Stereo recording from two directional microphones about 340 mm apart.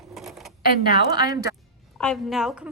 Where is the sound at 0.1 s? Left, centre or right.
Centre.